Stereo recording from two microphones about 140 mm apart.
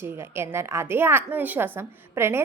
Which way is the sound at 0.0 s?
15° right (ahead or behind).